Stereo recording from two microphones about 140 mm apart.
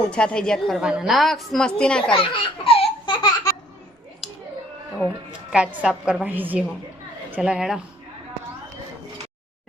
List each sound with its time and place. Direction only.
0.1 s a woman's voice: 5° left (ahead or behind)
0.8 s a woman's voice: 5° right (ahead or behind)
2.0 s baby laughter: 40° left (ahead or behind)
4.2 s a sound: centre (ahead or behind)
5.3 s a woman's voice: 10° right (ahead or behind)